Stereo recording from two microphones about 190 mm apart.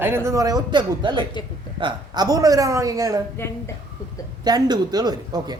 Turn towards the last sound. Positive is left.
turn(degrees=-20)  # may be behind; listen again after turning